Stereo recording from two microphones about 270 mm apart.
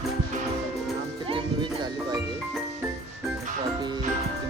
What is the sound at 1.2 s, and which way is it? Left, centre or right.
Music, centre.